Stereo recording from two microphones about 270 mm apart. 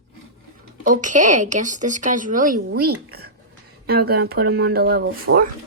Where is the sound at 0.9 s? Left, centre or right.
Right.